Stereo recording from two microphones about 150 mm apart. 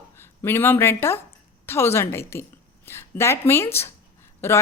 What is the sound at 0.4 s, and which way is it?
A woman's voice, 15° left (ahead or behind).